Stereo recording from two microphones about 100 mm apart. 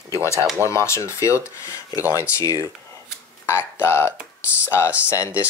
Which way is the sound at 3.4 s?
25° left (ahead or behind).